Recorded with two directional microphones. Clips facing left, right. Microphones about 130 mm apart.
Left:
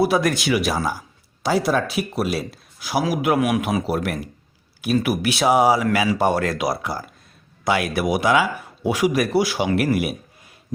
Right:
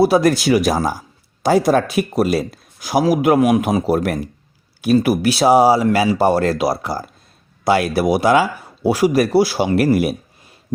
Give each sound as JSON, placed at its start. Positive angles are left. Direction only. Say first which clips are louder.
{"t": 0.0, "sound": "speech", "louder": "right 5 dB", "side_deg": -35}